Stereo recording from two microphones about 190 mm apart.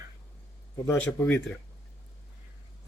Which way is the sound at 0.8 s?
5° left (ahead or behind).